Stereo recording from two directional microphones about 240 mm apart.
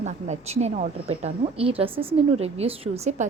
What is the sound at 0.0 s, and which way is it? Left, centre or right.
A woman's voice, right.